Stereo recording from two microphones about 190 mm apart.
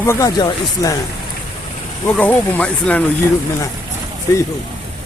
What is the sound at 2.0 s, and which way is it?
Speech, 10° left (ahead or behind).